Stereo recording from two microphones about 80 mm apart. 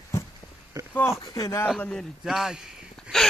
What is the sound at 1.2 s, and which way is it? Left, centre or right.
Speech, left.